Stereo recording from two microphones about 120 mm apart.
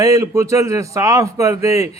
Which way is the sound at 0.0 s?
25° right (ahead or behind).